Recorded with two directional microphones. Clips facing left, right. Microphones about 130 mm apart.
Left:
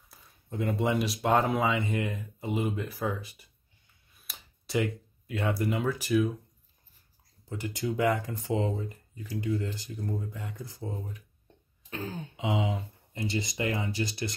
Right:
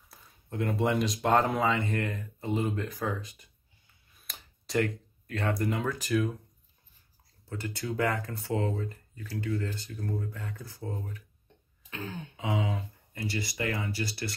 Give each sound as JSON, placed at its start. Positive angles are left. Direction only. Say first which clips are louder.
{"t": 0.1, "sound": "speech", "louder": "even", "side_deg": 0}
{"t": 7.4, "sound": "speech", "louder": "left 3 dB", "side_deg": 15}
{"t": 11.9, "sound": "throat clearing", "louder": "left 2 dB", "side_deg": 40}
{"t": 12.4, "sound": "speech", "louder": "left 1 dB", "side_deg": 20}